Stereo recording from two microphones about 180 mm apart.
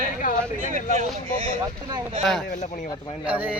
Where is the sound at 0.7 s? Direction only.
45° right (ahead or behind).